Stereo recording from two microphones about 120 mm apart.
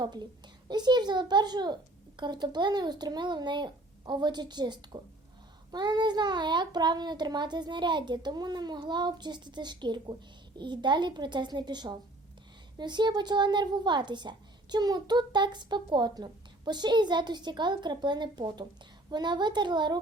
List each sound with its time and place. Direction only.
0.0 s speech: 35° right (ahead or behind)